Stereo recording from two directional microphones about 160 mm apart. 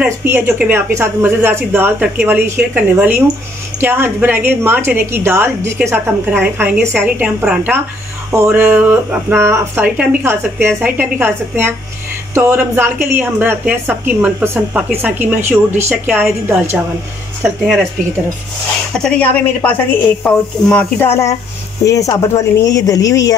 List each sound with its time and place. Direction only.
0.0 s a woman's voice: 15° right (ahead or behind)
18.9 s a woman's voice: 5° left (ahead or behind); by 23.3 s 20° left (ahead or behind)